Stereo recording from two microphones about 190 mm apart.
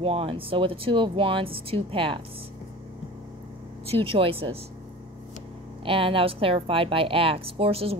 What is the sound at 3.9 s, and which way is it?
Speech, 30° right (ahead or behind).